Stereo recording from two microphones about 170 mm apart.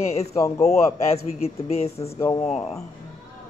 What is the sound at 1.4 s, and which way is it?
Speech, 40° left (ahead or behind).